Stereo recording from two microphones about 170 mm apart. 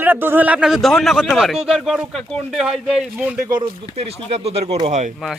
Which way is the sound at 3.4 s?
25° right (ahead or behind).